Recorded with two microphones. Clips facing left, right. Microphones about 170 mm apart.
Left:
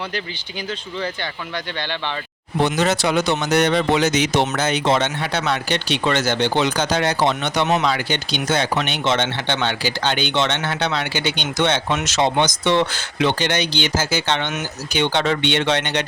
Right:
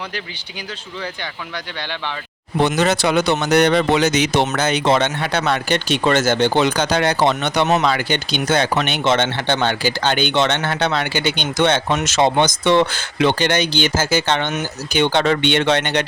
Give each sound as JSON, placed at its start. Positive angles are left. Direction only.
{"t": 2.6, "sound": "speech", "side_deg": -65}